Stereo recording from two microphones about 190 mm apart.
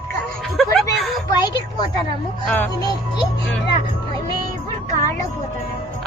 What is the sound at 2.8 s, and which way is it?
Speech, 20° left (ahead or behind).